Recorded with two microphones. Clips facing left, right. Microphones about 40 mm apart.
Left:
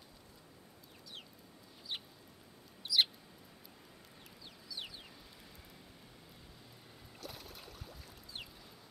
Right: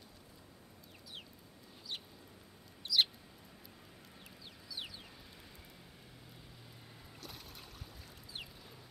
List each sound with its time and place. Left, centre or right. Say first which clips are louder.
1.9 s chicken: left 2 dB; centre
2.8 s mouse: even; centre
4.6 s chicken: even; centre
7.2 s boat: left 3 dB; centre